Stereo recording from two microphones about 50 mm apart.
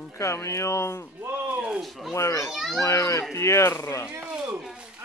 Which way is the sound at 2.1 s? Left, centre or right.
Left.